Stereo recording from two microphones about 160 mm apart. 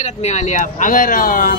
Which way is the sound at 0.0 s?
45° left (ahead or behind).